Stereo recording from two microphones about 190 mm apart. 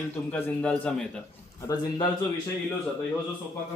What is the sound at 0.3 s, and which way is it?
Speech, 5° left (ahead or behind).